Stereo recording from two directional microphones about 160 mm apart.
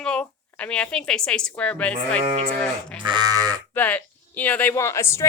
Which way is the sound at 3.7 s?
10° left (ahead or behind).